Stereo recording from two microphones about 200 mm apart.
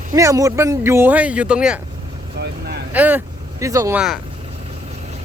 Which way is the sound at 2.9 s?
10° right (ahead or behind).